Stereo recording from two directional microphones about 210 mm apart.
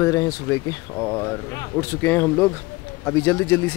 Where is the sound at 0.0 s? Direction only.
15° left (ahead or behind).